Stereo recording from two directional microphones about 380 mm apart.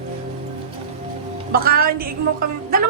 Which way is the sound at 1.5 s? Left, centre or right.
Right.